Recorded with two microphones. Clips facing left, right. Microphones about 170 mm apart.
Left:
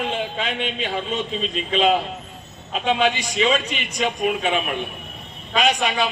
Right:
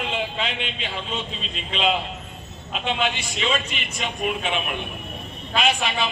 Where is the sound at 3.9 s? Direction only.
40° left (ahead or behind).